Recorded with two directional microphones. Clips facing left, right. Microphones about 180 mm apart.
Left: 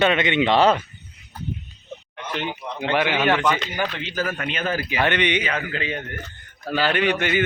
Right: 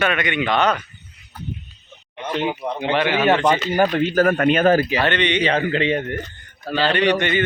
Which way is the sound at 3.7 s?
45° right (ahead or behind).